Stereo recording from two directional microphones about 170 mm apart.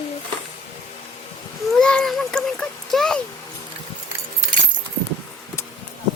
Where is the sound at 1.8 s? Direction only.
5° left (ahead or behind).